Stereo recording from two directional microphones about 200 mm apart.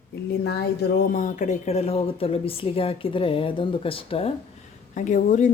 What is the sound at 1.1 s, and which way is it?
A woman's voice, 40° left (ahead or behind).